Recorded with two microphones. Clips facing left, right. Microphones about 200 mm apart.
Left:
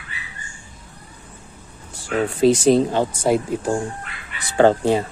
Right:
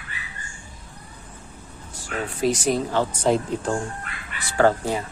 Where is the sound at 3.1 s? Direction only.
10° left (ahead or behind).